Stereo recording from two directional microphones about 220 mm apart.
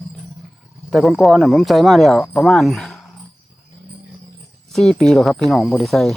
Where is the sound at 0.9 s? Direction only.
Centre (ahead or behind).